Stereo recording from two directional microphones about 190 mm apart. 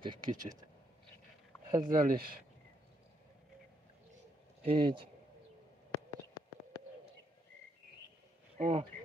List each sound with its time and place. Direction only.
0.0 s speech: 25° right (ahead or behind)
1.7 s speech: 20° right (ahead or behind)
2.0 s speech: 50° right (ahead or behind)
4.6 s speech: 30° right (ahead or behind)
8.5 s speech: 40° right (ahead or behind)